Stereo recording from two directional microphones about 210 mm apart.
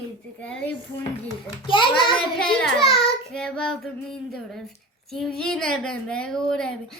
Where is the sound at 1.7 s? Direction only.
25° left (ahead or behind).